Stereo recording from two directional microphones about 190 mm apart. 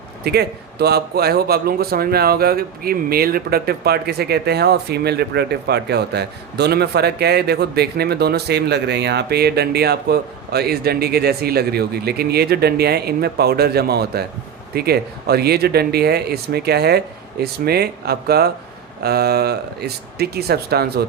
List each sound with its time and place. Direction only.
0.3 s speech: 60° right (ahead or behind)